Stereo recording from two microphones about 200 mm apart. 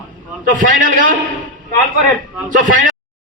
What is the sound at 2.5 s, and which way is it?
Speech, 40° right (ahead or behind).